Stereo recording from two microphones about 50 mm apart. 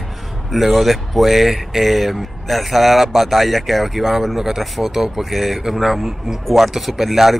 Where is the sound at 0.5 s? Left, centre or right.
Centre.